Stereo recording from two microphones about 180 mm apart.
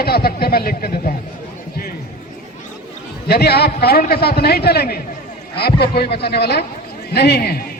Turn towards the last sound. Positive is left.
turn(degrees=65)  # may be behind; listen again after turning